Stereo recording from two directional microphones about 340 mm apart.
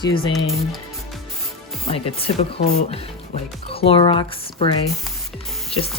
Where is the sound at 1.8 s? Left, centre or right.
Centre.